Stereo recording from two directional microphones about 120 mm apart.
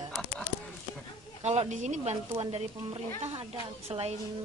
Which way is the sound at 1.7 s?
75° right (ahead or behind).